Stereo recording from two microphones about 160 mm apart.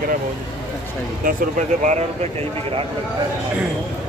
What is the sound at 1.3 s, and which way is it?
Speech, 50° right (ahead or behind).